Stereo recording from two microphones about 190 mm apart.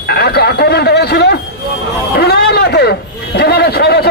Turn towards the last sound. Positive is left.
turn(degrees=60)  # may be behind; listen again after turning